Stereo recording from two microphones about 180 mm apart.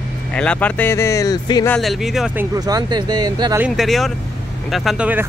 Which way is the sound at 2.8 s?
25° right (ahead or behind).